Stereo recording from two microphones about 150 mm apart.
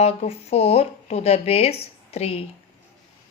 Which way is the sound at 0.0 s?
45° left (ahead or behind).